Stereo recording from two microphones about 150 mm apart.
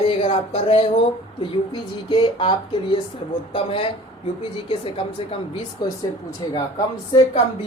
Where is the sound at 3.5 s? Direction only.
40° left (ahead or behind).